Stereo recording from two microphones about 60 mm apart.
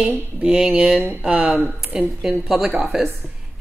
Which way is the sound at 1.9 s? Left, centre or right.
Centre.